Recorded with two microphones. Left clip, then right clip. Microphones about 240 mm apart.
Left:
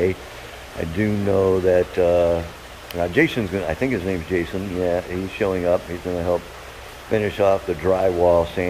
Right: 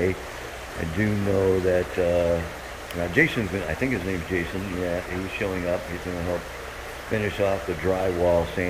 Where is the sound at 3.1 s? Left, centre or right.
Centre.